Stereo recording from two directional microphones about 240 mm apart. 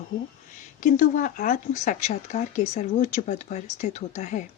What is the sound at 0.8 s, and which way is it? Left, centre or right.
Speech, left.